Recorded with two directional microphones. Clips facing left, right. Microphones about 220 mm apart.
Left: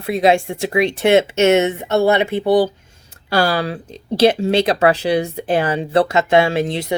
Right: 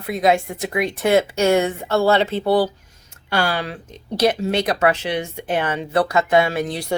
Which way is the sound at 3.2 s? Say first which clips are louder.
Left 5 dB; 35° left (ahead or behind).